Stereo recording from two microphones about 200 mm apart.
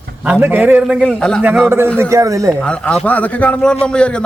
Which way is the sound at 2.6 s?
5° left (ahead or behind).